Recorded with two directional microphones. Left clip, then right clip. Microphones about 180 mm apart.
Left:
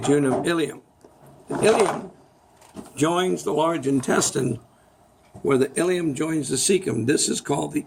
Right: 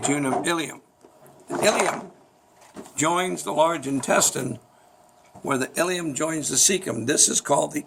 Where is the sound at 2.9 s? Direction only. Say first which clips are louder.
Left 1 dB; 60° right (ahead or behind).